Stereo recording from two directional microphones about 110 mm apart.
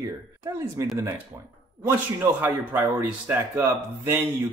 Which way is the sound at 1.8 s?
20° right (ahead or behind).